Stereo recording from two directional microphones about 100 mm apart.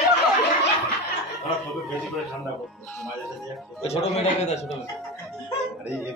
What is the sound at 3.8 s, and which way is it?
Speech, 90° left.